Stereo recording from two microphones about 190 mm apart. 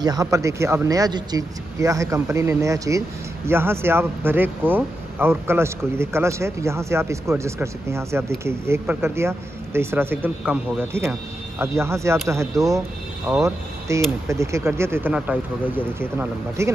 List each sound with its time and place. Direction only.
0.0 s speech: 20° right (ahead or behind)